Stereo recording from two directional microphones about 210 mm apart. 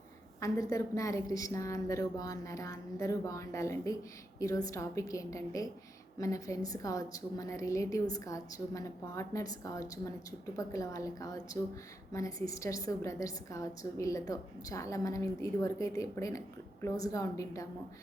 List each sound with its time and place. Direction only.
0.3 s a woman's voice: 15° left (ahead or behind)